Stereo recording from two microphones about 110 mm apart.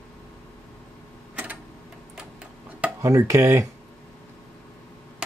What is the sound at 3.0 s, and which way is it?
Speech, 25° right (ahead or behind).